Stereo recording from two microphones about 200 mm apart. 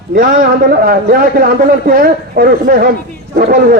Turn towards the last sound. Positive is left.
turn(degrees=-45)  # may be behind; listen again after turning